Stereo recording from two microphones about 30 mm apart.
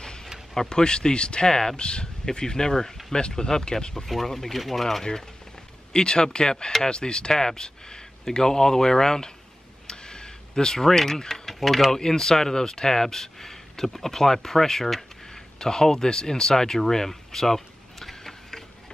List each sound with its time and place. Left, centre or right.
0.0 s a sound: left
0.6 s speech: left
3.2 s speech: left
3.4 s speech: left
4.3 s speech: centre
5.9 s speech: left
9.8 s a sound: left
10.9 s speech: centre
11.4 s a sound: centre
11.9 s speech: centre
15.3 s speech: left